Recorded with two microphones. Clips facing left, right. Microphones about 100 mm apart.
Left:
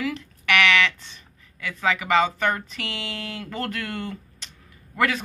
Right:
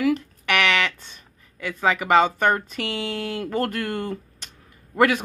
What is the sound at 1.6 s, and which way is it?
Speech, 40° right (ahead or behind).